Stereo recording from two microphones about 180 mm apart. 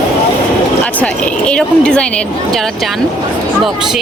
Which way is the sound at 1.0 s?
5° left (ahead or behind).